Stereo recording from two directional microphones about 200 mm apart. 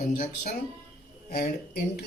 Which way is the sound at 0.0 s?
40° left (ahead or behind).